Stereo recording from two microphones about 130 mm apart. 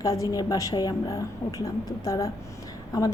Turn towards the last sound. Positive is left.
turn(degrees=30)  # may be behind; listen again after turning